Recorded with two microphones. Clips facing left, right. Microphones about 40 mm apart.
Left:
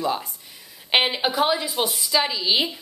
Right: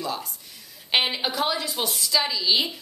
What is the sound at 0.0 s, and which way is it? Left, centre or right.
A woman's voice, left.